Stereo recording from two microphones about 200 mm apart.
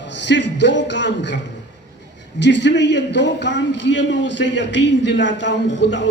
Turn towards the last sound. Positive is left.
turn(degrees=65)  # may be behind; listen again after turning